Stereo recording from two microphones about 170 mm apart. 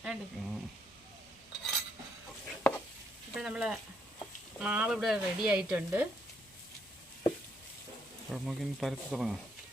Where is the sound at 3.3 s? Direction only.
5° right (ahead or behind).